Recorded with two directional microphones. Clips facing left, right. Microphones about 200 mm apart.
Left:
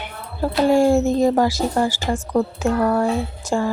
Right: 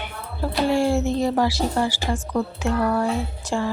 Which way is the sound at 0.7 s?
45° left (ahead or behind).